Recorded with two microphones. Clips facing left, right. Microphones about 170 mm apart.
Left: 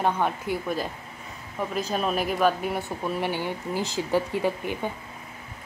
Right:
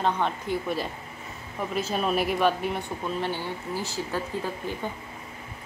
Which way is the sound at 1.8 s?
Centre (ahead or behind).